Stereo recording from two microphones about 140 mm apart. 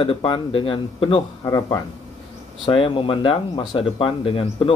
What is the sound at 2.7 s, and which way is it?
Speech, 40° left (ahead or behind).